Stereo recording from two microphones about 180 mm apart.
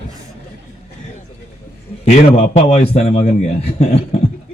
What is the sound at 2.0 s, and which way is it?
A man's voice, 40° left (ahead or behind).